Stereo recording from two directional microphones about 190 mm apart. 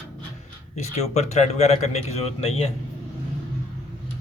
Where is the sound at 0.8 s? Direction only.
35° left (ahead or behind).